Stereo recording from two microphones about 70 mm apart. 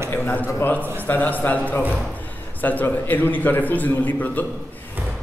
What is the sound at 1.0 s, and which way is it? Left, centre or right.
A man's voice, left.